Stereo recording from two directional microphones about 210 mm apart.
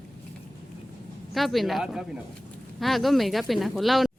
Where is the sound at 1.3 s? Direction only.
Centre (ahead or behind).